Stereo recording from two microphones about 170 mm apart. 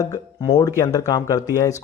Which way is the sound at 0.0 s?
20° left (ahead or behind).